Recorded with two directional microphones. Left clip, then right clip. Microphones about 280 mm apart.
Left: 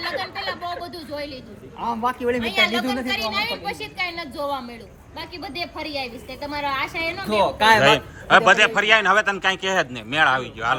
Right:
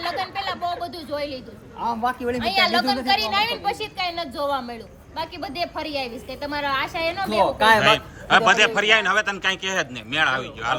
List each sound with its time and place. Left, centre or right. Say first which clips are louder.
0.0 s a sound: right 1 dB; centre
1.1 s a woman's voice: right 3 dB; centre
1.8 s a man's voice: even; centre
3.0 s a woman's voice: right 3 dB; right
7.3 s a man's voice: left 1 dB; centre